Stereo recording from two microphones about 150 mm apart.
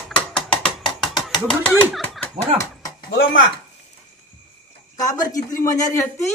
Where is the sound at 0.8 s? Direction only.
30° left (ahead or behind).